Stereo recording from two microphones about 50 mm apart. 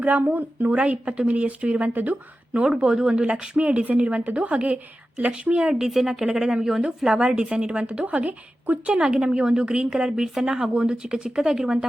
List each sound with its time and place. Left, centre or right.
0.0 s a woman's voice: right
2.6 s a woman's voice: centre; by 9.0 s right
9.0 s speech: centre